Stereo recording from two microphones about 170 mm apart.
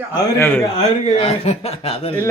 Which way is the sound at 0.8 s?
35° left (ahead or behind).